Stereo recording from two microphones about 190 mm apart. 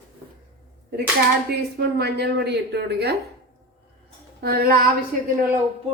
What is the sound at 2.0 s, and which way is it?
Speech, 60° right (ahead or behind).